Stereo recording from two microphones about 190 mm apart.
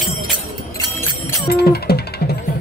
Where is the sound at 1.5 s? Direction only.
55° left (ahead or behind).